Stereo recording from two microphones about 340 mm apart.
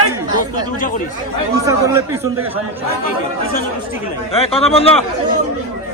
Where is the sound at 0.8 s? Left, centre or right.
Left.